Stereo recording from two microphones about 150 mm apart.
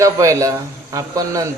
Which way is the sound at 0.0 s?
20° right (ahead or behind).